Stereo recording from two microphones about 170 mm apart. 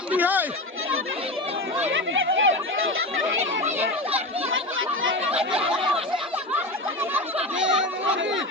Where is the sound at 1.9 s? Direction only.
90° right.